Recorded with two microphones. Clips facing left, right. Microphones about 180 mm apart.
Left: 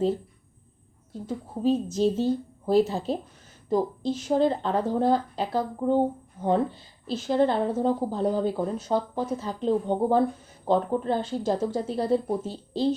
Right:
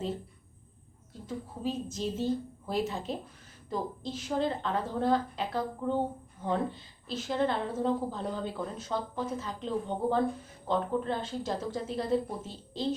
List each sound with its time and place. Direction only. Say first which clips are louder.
1.6 s speech: left 11 dB; 30° left (ahead or behind)